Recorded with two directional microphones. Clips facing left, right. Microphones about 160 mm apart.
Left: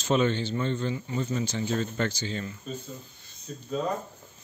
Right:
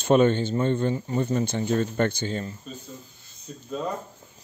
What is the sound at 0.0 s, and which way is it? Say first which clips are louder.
Speech: right 6 dB; 50° right (ahead or behind).